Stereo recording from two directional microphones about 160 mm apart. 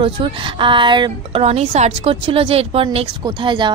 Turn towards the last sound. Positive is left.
turn(degrees=-30)  # may be behind; listen again after turning